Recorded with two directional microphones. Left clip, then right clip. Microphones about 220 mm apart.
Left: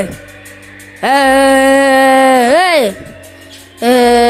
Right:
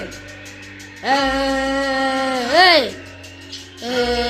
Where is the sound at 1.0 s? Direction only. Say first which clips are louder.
Left 9 dB; 40° left (ahead or behind).